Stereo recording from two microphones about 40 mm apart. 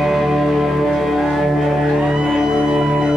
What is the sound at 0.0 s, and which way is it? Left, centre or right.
Music, centre.